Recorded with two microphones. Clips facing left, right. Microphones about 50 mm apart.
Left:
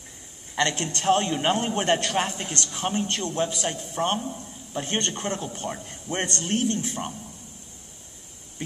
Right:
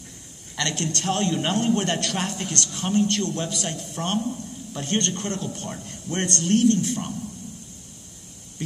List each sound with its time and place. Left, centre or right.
0.6 s a man's voice: centre